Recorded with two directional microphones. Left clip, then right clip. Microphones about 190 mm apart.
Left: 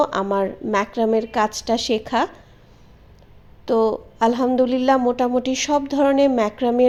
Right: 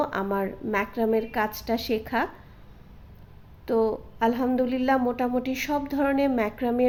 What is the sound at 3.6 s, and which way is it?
A woman's voice, 20° left (ahead or behind).